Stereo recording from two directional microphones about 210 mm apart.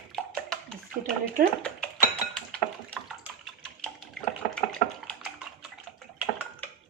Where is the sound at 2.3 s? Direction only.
5° left (ahead or behind).